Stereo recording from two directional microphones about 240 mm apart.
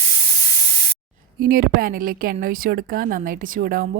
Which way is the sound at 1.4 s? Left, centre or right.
Right.